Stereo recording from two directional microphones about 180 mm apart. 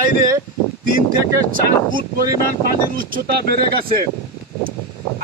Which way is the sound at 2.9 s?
50° right (ahead or behind).